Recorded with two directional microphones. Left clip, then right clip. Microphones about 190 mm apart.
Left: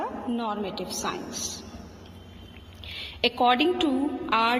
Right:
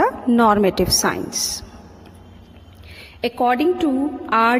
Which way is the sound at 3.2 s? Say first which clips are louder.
Right 4 dB; 25° right (ahead or behind).